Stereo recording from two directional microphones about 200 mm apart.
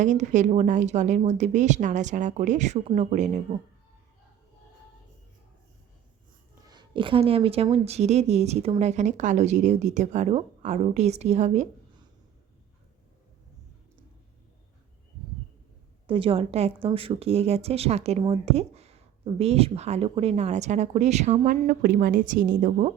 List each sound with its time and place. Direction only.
0.0 s speech: 35° right (ahead or behind)
6.7 s speech: 25° right (ahead or behind)
16.0 s speech: 25° right (ahead or behind)